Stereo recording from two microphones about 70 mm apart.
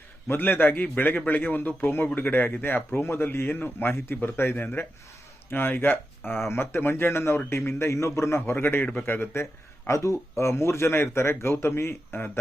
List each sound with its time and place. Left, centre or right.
0.3 s speech: left